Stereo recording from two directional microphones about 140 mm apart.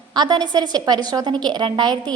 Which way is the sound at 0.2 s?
30° right (ahead or behind).